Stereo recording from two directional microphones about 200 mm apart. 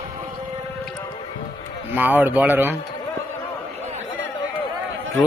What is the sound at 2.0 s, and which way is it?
Speech, 10° right (ahead or behind).